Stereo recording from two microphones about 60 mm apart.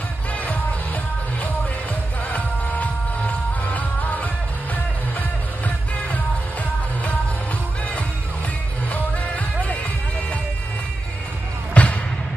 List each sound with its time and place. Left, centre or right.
2.3 s music: left
8.9 s music: left
11.7 s music: left